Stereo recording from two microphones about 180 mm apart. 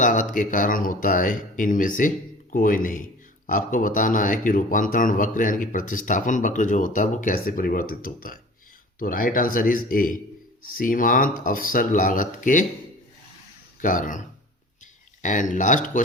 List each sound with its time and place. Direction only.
0.0 s speech: 45° left (ahead or behind)
13.8 s speech: 45° left (ahead or behind)
15.2 s speech: 45° left (ahead or behind)